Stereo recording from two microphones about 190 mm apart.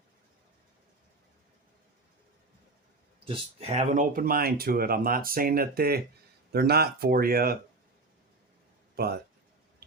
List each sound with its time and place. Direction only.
3.2 s speech: 30° right (ahead or behind); by 7.6 s 50° right (ahead or behind)
9.0 s speech: 55° right (ahead or behind)